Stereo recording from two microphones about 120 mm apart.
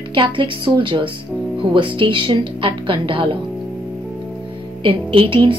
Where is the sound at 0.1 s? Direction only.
40° right (ahead or behind).